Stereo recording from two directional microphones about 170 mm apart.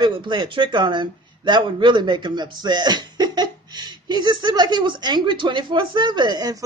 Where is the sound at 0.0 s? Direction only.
25° right (ahead or behind).